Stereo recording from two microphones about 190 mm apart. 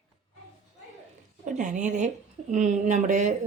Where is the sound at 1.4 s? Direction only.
40° right (ahead or behind).